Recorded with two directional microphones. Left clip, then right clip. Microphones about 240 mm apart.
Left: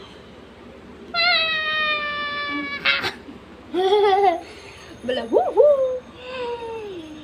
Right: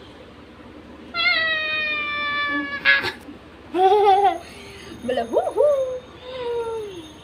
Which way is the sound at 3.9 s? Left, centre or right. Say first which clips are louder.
Even; centre.